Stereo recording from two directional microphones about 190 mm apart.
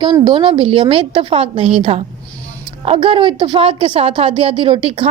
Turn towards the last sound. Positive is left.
turn(degrees=-25)  # may be behind; listen again after turning